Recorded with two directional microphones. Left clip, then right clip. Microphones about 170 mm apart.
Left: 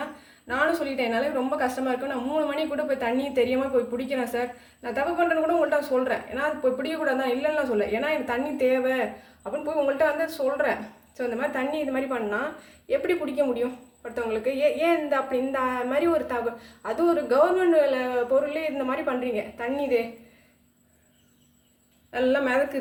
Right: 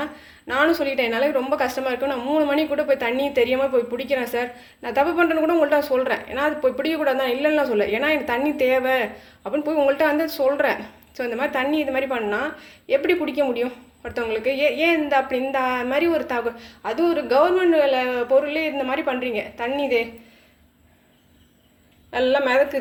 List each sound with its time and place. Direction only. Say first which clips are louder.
0.4 s a woman's voice: right 5 dB; 30° right (ahead or behind)
22.1 s a woman's voice: right 4 dB; 20° right (ahead or behind)